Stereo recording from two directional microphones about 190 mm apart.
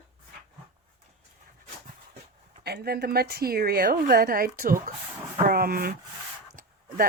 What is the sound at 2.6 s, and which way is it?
A woman's voice, 55° right (ahead or behind).